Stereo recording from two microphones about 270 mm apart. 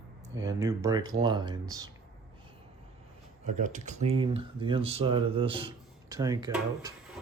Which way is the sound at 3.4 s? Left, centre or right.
Right.